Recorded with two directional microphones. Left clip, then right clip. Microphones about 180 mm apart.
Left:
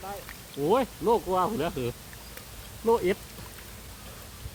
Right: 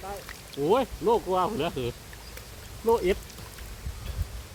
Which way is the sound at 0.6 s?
25° left (ahead or behind).